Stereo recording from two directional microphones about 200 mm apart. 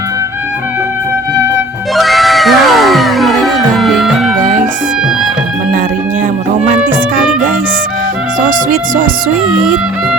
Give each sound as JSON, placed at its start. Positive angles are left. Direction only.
{"t": 2.0, "sound": "music", "side_deg": 0}
{"t": 8.4, "sound": "music", "side_deg": -40}